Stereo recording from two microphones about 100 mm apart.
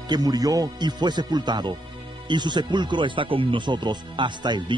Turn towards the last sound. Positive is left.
turn(degrees=-50)  # may be behind; listen again after turning